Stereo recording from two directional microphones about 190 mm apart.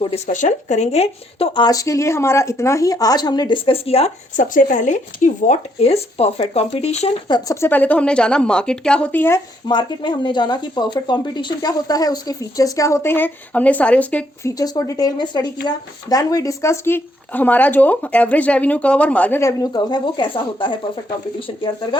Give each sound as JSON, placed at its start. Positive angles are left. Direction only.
{"t": 0.3, "sound": "speech", "side_deg": 40}
{"t": 7.3, "sound": "speech", "side_deg": 20}
{"t": 9.6, "sound": "speech", "side_deg": 25}
{"t": 14.6, "sound": "speech", "side_deg": 20}